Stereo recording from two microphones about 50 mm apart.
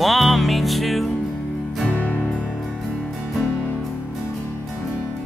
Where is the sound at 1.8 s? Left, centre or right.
Left.